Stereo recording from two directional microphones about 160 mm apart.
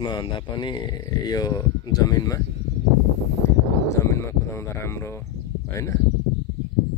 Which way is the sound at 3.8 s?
15° left (ahead or behind).